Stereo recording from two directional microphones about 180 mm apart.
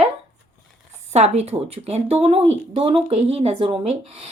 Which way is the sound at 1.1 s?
35° right (ahead or behind).